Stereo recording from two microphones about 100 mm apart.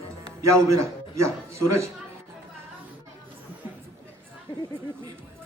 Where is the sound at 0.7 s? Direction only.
30° right (ahead or behind).